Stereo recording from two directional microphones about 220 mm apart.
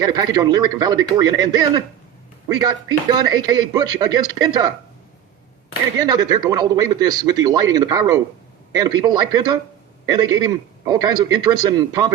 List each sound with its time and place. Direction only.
0.0 s speech: 15° right (ahead or behind)
6.0 s speech: 15° right (ahead or behind)